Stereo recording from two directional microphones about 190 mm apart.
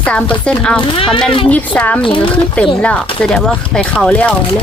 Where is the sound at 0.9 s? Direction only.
30° left (ahead or behind).